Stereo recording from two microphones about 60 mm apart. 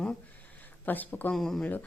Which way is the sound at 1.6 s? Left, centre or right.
Left.